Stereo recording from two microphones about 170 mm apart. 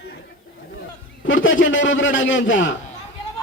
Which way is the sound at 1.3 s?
90° left.